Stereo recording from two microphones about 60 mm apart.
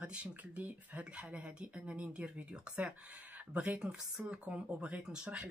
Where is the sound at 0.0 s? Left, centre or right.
Centre.